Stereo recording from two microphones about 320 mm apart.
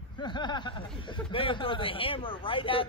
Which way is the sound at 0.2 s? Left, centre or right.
Centre.